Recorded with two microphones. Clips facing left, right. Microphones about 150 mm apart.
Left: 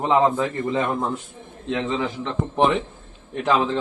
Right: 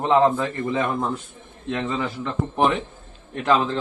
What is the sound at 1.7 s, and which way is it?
Speech, 15° left (ahead or behind).